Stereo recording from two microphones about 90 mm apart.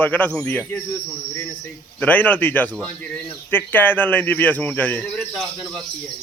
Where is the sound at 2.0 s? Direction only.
20° left (ahead or behind).